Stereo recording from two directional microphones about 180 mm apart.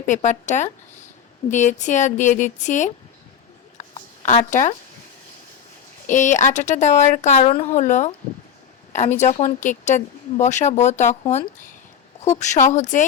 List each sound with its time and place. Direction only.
0.1 s a woman's voice: 40° left (ahead or behind)
3.8 s a sound: 40° left (ahead or behind)
6.1 s a woman's voice: 45° left (ahead or behind)